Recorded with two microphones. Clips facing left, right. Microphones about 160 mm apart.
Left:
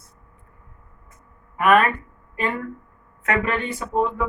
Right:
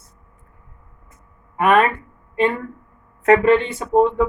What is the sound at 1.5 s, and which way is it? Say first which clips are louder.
Speech: right 1 dB; 30° right (ahead or behind).